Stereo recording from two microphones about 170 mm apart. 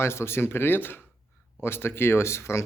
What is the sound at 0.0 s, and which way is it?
Speech, 15° left (ahead or behind).